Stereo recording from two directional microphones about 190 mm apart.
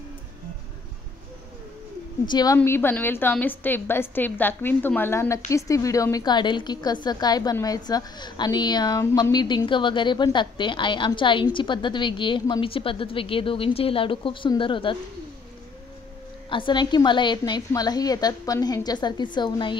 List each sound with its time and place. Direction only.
2.2 s a woman's voice: 20° left (ahead or behind)
16.4 s a woman's voice: 25° left (ahead or behind)